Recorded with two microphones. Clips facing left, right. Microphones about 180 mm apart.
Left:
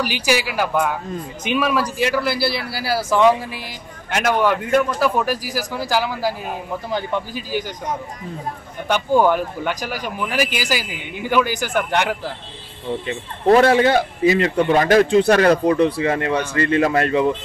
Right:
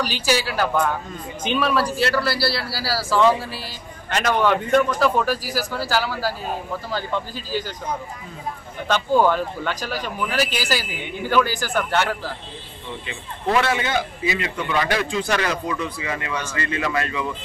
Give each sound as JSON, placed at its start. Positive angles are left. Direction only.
{"t": 0.0, "sound": "speech", "side_deg": 15}
{"t": 8.8, "sound": "speech", "side_deg": 15}
{"t": 13.0, "sound": "speech", "side_deg": 45}